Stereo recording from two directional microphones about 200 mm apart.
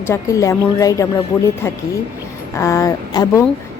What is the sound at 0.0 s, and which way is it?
Speech, 15° left (ahead or behind).